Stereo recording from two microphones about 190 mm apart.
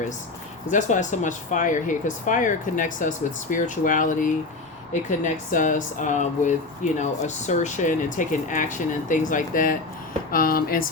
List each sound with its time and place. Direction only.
0.7 s speech: 40° left (ahead or behind)